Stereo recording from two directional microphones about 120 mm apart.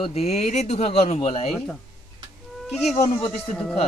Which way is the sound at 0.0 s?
60° left (ahead or behind).